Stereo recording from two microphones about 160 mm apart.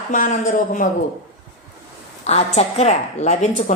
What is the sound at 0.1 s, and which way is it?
Speech, 55° left (ahead or behind).